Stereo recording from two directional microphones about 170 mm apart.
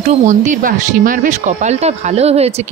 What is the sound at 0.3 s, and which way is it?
Speech, 50° right (ahead or behind).